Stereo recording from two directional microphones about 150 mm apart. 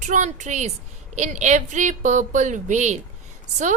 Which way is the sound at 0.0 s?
55° right (ahead or behind).